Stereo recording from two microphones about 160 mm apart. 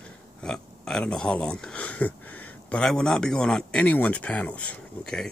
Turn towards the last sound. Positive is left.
turn(degrees=5)  # may be behind; listen again after turning